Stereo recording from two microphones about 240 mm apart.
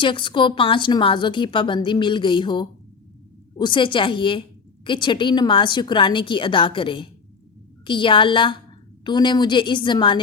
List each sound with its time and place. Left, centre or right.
0.0 s a woman's voice: left